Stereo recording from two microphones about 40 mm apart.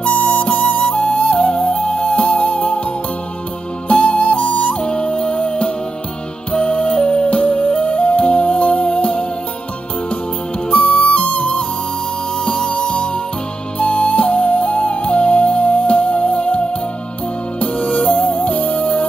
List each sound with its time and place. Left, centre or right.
0.0 s music: left
3.9 s music: left
10.7 s music: left
12.8 s music: left
18.1 s music: left